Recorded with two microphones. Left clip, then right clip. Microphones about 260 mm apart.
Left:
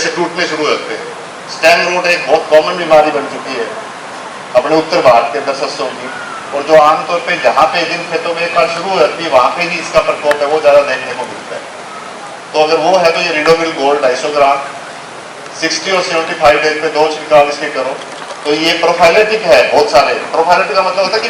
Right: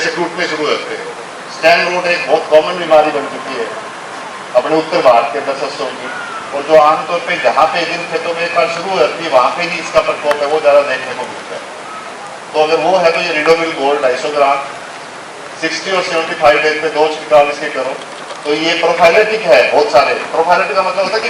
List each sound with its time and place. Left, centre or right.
0.0 s a man's voice: centre
4.5 s a man's voice: centre
6.7 s a man's voice: centre
12.6 s a man's voice: centre
13.1 s a man's voice: centre
15.6 s a man's voice: centre